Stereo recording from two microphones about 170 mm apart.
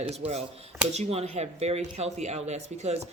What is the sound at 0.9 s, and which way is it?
Speech, 40° right (ahead or behind).